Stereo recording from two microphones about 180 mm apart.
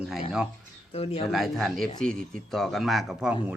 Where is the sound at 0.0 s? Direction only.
5° right (ahead or behind).